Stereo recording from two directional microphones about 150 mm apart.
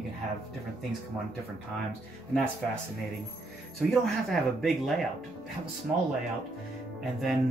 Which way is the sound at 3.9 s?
Centre (ahead or behind).